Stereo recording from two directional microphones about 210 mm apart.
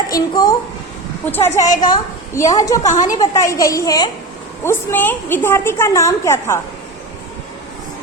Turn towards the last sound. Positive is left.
turn(degrees=15)  # may be behind; listen again after turning